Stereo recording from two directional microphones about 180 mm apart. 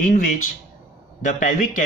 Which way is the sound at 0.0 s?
45° left (ahead or behind).